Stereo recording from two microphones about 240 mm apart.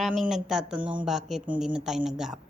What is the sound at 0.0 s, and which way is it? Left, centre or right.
Speech, centre.